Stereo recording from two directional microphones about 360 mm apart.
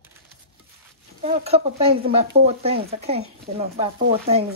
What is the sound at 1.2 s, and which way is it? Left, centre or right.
Speech, centre.